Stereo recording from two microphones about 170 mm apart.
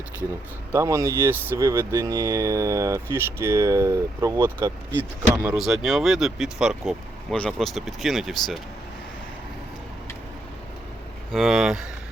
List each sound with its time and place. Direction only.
0.7 s speech: 20° right (ahead or behind)
5.5 s speech: centre (ahead or behind)
11.3 s speech: centre (ahead or behind)